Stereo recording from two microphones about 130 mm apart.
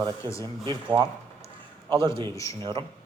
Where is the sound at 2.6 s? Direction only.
40° right (ahead or behind).